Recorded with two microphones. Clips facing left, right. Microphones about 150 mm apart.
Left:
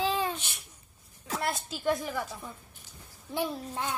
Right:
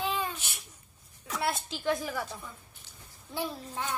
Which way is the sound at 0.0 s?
35° left (ahead or behind).